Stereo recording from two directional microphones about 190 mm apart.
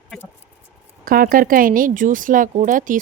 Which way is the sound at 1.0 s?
50° right (ahead or behind).